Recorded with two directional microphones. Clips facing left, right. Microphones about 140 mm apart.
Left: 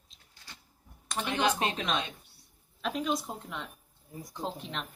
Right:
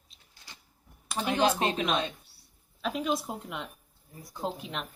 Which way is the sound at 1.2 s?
35° right (ahead or behind).